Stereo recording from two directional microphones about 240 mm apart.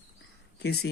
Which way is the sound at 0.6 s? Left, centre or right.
Left.